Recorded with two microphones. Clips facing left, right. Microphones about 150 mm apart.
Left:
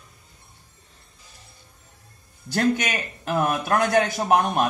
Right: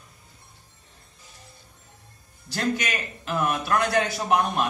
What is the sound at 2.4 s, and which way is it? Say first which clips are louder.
A man's voice: left 5 dB; 55° left (ahead or behind).